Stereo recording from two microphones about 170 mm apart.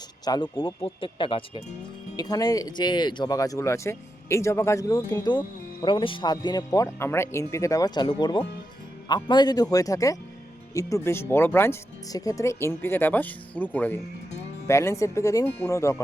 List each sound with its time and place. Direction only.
0.3 s speech: 20° left (ahead or behind)